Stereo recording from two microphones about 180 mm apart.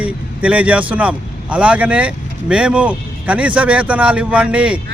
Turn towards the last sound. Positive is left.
turn(degrees=-5)  # may be behind; listen again after turning